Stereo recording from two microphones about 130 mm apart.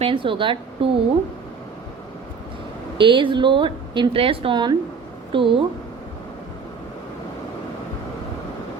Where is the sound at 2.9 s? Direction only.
40° right (ahead or behind).